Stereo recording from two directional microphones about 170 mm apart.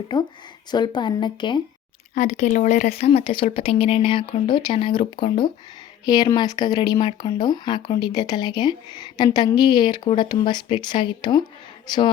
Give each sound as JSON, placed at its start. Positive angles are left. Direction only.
{"t": 0.1, "sound": "speech", "side_deg": 25}
{"t": 2.1, "sound": "speech", "side_deg": 45}